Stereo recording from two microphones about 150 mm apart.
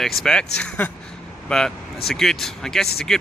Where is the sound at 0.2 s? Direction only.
5° left (ahead or behind).